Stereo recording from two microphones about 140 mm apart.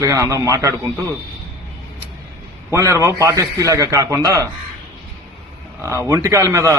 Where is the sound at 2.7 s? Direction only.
20° right (ahead or behind).